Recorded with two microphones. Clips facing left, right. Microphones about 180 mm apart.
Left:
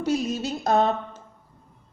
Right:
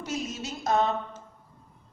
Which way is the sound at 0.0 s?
35° left (ahead or behind).